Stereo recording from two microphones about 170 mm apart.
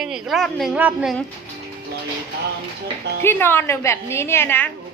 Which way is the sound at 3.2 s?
15° left (ahead or behind).